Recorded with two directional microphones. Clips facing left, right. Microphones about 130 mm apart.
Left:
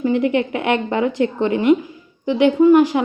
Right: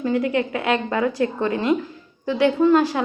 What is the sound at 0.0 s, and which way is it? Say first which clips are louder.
A woman's voice: left 4 dB; 20° left (ahead or behind).